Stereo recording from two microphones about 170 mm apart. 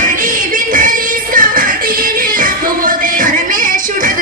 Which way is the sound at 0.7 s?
55° right (ahead or behind).